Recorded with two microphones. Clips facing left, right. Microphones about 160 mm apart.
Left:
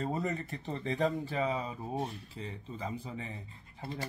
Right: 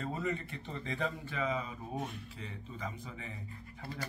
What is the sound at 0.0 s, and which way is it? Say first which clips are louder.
Speech: left 2 dB; 40° left (ahead or behind).